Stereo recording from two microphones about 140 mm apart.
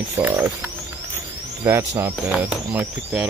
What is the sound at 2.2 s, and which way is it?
Speech, 5° right (ahead or behind).